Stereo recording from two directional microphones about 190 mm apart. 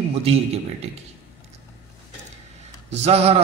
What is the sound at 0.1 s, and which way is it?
Speech, 30° right (ahead or behind).